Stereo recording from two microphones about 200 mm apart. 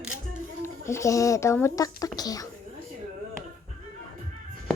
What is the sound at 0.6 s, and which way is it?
Speech, 15° left (ahead or behind).